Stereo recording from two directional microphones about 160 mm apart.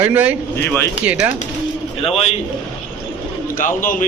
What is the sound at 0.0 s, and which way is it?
A man's voice, 10° right (ahead or behind).